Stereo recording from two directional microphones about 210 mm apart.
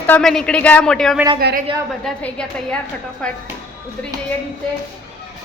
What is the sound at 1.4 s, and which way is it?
Speech, 50° right (ahead or behind).